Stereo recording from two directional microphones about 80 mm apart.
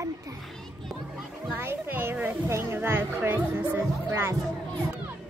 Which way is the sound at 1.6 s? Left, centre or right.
Right.